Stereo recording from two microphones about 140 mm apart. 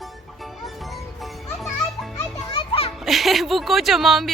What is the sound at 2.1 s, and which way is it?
Children playing, 35° left (ahead or behind).